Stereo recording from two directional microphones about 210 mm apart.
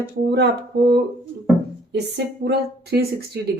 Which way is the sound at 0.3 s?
55° right (ahead or behind).